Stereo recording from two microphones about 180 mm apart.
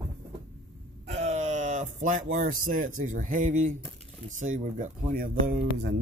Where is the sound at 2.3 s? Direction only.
45° right (ahead or behind).